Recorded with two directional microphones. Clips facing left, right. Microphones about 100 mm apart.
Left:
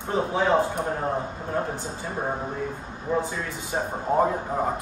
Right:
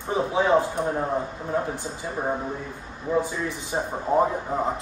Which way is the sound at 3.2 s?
20° right (ahead or behind).